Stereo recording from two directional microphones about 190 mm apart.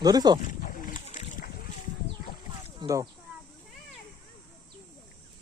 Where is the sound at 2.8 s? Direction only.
15° right (ahead or behind).